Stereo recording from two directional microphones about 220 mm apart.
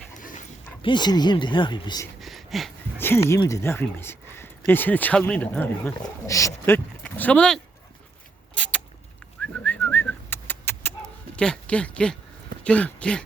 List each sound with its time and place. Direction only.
0.2 s dog: 35° left (ahead or behind)
0.8 s speech: 20° left (ahead or behind)
2.2 s speech: centre (ahead or behind)
8.5 s rodents: 5° left (ahead or behind)
9.4 s whistling: 5° left (ahead or behind)
11.3 s speech: 5° left (ahead or behind)